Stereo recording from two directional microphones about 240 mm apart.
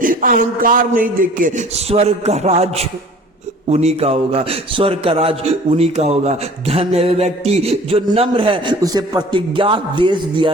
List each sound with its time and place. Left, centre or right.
0.0 s a man's voice: right; by 10.5 s centre